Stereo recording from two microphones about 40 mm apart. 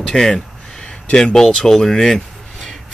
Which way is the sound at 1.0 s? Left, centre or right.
Left.